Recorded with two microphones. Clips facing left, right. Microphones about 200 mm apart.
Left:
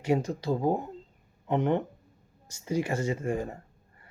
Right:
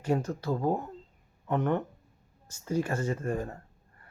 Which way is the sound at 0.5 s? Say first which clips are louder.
Left 2 dB; 25° left (ahead or behind).